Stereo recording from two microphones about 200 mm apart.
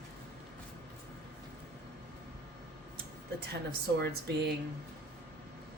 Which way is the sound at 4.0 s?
55° right (ahead or behind).